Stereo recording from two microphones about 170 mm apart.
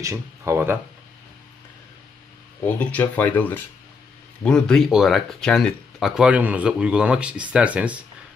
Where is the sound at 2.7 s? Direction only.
10° left (ahead or behind); by 8.0 s 10° right (ahead or behind).